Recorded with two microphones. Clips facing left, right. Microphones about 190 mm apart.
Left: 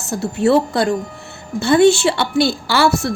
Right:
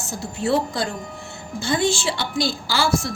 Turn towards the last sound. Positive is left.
turn(degrees=65)  # may be behind; listen again after turning